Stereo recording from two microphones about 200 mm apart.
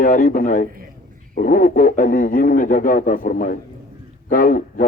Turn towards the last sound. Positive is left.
turn(degrees=40)  # may be behind; listen again after turning